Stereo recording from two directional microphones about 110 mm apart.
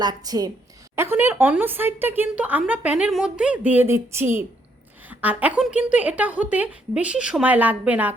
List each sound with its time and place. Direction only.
0.0 s a woman's voice: 35° right (ahead or behind)
0.9 s speech: 20° right (ahead or behind)